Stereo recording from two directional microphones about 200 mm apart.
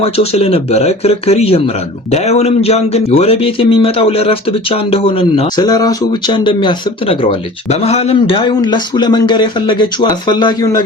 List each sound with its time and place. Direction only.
0.0 s speech: 30° left (ahead or behind)